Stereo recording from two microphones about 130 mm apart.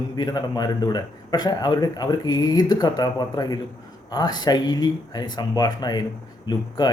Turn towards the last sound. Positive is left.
turn(degrees=35)  # may be behind; listen again after turning